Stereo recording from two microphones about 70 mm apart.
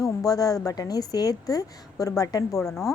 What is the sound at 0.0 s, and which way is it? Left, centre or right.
A woman's voice, left.